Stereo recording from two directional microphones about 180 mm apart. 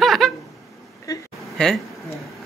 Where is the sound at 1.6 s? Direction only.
5° left (ahead or behind).